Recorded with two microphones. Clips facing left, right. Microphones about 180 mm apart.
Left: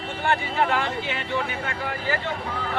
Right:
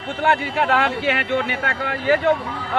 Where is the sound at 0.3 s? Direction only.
65° right (ahead or behind).